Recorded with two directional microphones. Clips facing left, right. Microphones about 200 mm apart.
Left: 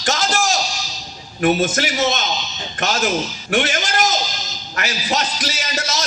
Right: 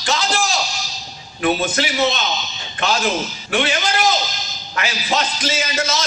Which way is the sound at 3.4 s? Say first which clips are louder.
Right 1 dB; 45° left (ahead or behind).